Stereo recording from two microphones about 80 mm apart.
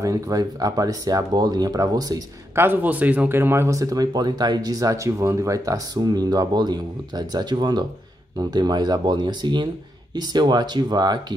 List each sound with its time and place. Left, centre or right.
0.0 s speech: right
2.5 s speech: right
5.9 s speech: right